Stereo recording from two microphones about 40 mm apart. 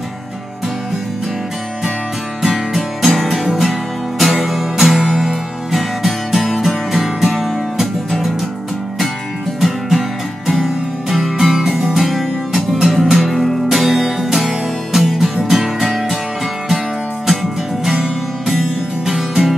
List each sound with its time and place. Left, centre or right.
2.4 s music: centre
9.6 s music: centre
18.5 s music: centre